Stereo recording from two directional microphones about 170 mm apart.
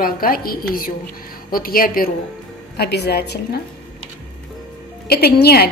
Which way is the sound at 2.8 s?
70° left (ahead or behind).